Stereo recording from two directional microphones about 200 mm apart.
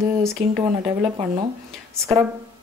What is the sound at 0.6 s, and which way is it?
Speech, 20° right (ahead or behind).